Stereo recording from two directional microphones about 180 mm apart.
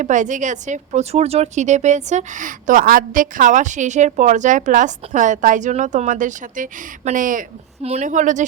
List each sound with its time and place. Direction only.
0.0 s a woman's voice: 45° right (ahead or behind)